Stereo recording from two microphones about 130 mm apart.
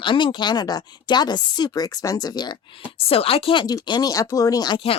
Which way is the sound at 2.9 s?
50° left (ahead or behind).